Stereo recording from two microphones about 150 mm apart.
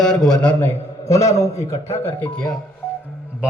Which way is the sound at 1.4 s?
20° left (ahead or behind).